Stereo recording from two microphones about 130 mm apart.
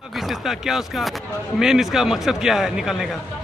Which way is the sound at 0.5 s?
5° right (ahead or behind).